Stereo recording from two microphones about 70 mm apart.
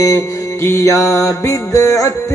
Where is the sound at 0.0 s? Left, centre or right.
Left.